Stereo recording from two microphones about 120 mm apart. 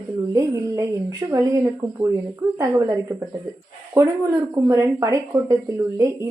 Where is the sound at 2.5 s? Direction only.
25° right (ahead or behind).